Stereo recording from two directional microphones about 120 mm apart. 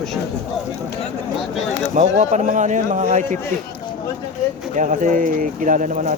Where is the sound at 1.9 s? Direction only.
90° right.